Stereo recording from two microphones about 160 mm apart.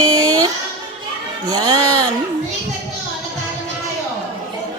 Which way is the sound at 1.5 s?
30° right (ahead or behind).